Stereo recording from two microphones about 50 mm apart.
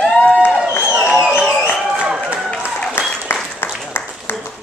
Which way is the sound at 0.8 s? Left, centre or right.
Right.